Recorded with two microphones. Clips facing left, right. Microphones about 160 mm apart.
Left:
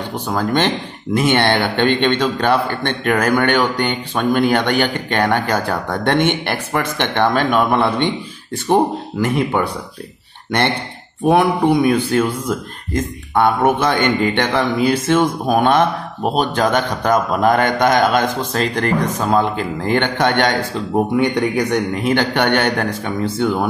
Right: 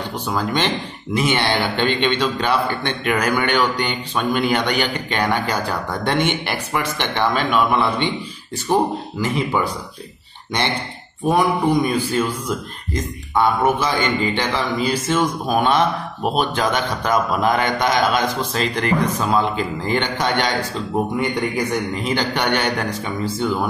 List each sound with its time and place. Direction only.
0.3 s speech: 50° left (ahead or behind)
11.2 s speech: 60° left (ahead or behind)